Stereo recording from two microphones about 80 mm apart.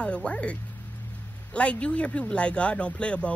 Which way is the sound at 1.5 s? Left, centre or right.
Centre.